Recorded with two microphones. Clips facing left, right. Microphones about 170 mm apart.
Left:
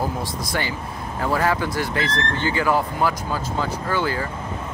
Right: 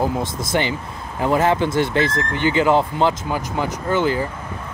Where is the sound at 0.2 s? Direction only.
20° right (ahead or behind).